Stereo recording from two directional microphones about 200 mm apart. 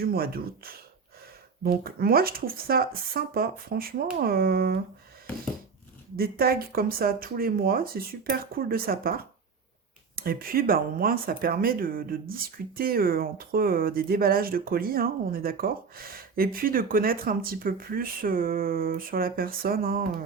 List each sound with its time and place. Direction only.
0.0 s speech: 50° right (ahead or behind)
6.1 s speech: 50° right (ahead or behind)